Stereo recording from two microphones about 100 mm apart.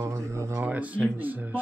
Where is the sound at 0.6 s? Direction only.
15° right (ahead or behind).